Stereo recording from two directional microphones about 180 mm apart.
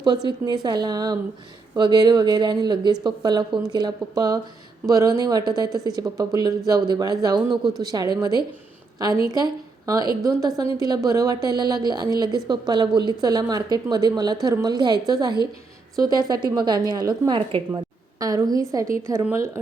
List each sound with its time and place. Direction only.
0.0 s a woman's voice: 25° right (ahead or behind)